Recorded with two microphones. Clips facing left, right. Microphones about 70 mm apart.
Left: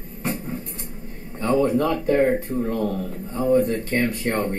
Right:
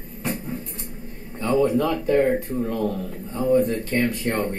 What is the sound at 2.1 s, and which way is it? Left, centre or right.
Speech, left.